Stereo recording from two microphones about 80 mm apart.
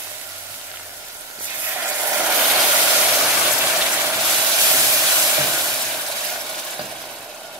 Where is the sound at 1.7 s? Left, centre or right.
Right.